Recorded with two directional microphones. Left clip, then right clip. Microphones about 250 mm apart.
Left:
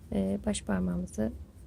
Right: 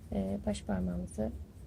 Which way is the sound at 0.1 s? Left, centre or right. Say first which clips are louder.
Left 4 dB; left.